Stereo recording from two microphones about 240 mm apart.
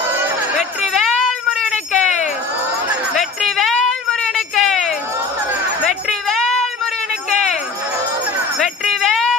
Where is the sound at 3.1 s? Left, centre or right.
Centre.